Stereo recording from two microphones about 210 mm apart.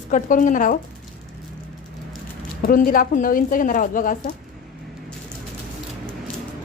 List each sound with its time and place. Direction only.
0.1 s speech: 40° left (ahead or behind)
2.6 s speech: 45° left (ahead or behind)